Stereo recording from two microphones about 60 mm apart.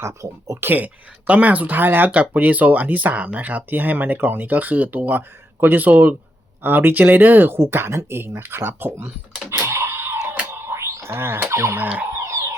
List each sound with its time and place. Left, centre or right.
0.0 s speech: right
0.6 s speech: right
9.5 s computer keyboard: right
10.6 s music: right
11.0 s speech: right
12.2 s a sound: right